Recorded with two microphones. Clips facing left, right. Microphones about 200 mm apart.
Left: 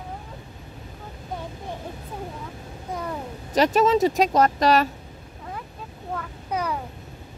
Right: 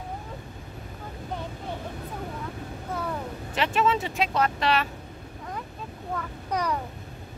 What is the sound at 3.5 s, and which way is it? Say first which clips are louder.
Speech: left 6 dB; 40° left (ahead or behind).